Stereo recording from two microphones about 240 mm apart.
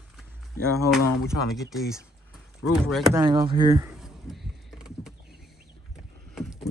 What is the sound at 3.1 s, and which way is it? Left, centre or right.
Speech, centre.